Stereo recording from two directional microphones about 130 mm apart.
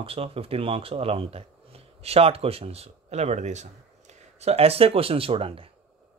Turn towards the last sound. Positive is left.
turn(degrees=-45)  # may be behind; listen again after turning